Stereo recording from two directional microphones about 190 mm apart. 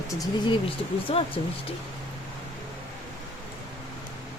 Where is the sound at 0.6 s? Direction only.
30° left (ahead or behind).